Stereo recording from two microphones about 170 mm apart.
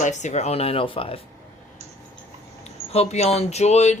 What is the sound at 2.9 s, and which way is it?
Speech, 40° left (ahead or behind).